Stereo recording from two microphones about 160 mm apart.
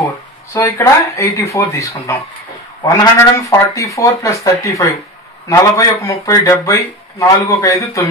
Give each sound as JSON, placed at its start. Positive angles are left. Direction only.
{"t": 0.5, "sound": "speech", "side_deg": 20}